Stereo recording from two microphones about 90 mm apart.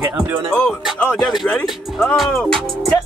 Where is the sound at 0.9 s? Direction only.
20° left (ahead or behind).